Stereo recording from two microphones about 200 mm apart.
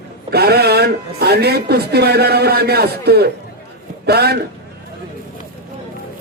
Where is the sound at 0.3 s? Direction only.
50° right (ahead or behind).